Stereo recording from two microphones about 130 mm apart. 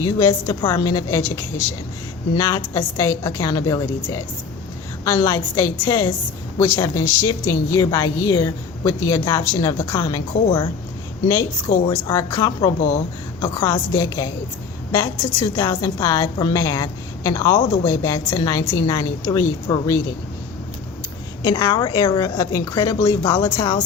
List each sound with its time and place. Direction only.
0.0 s a woman's voice: 25° left (ahead or behind)
2.7 s a woman's voice: 25° left (ahead or behind)
12.0 s a woman's voice: 25° left (ahead or behind)
21.4 s a woman's voice: 30° left (ahead or behind)